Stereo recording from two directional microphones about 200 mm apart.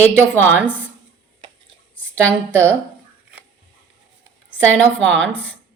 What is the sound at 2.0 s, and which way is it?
Speech, 5° left (ahead or behind).